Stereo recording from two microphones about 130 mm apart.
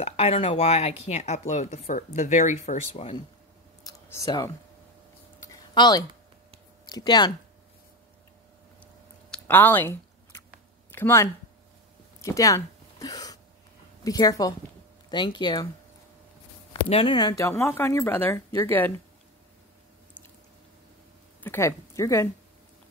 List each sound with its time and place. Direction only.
0.0 s speech: 50° left (ahead or behind)
3.8 s clicking: 25° left (ahead or behind)
5.8 s speech: 30° left (ahead or behind)
9.3 s speech: 15° left (ahead or behind)
12.2 s a sound: 25° left (ahead or behind)
14.0 s speech: 25° left (ahead or behind)
16.8 s speech: 45° left (ahead or behind); by 18.9 s 15° left (ahead or behind)
21.4 s speech: 20° left (ahead or behind)